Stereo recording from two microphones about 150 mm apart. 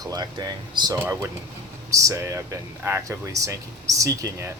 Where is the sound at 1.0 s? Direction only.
15° right (ahead or behind).